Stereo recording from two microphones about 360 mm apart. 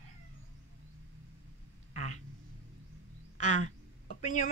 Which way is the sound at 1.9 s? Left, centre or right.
Centre.